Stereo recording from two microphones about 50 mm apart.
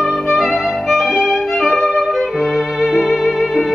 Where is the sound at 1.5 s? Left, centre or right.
Centre.